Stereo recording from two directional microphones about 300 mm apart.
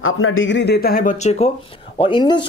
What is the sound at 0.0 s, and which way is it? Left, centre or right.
Speech, left.